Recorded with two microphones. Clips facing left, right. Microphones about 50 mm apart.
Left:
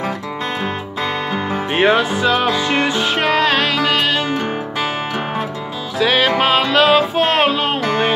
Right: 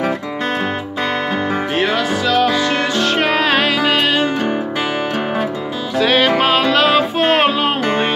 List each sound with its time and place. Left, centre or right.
1.7 s music: left
3.1 s music: centre
5.9 s music: centre